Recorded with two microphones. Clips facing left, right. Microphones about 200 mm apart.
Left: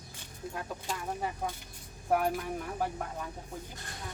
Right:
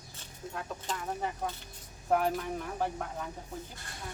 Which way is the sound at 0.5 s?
10° left (ahead or behind).